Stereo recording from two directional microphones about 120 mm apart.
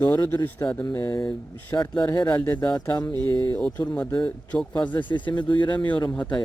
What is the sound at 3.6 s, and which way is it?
Speech, 15° left (ahead or behind).